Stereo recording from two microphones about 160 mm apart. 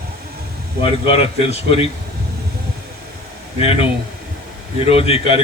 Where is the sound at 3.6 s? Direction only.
35° left (ahead or behind).